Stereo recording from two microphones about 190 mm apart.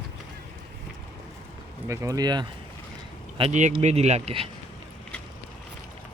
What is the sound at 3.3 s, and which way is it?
Speech, 35° right (ahead or behind).